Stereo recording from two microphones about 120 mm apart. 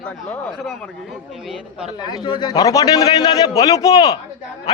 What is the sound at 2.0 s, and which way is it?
A man's voice, 40° left (ahead or behind).